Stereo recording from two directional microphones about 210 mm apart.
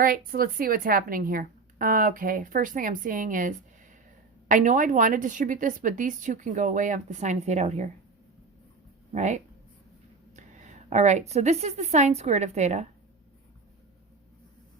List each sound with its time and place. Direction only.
0.0 s a woman's voice: 45° right (ahead or behind)
9.1 s a woman's voice: 35° right (ahead or behind)
10.3 s a sound: 35° right (ahead or behind)
11.3 s a woman's voice: 30° right (ahead or behind)